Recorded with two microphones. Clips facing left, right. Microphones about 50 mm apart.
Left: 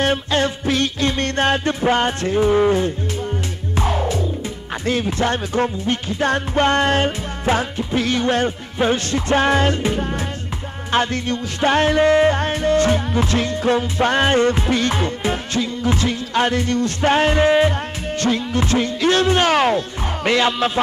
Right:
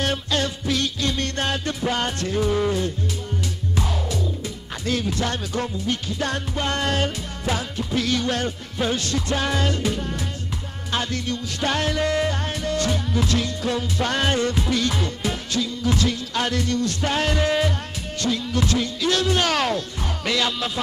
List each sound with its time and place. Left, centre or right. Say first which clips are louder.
0.0 s music: left 5 dB; left